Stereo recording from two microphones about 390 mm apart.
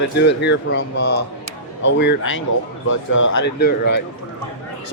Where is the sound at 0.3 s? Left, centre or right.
Left.